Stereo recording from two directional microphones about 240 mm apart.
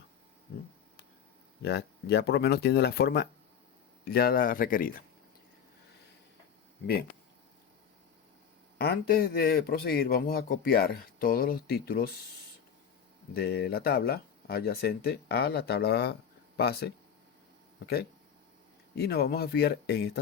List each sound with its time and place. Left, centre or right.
1.6 s a man's voice: left
8.8 s a man's voice: left
13.3 s a man's voice: left
18.9 s a man's voice: left